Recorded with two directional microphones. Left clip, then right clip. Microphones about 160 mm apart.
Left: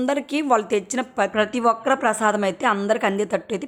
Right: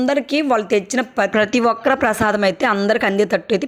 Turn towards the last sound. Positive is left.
turn(degrees=-20)  # may be behind; listen again after turning